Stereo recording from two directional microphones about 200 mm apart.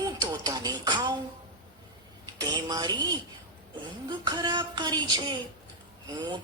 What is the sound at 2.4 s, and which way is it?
Speech, 20° right (ahead or behind).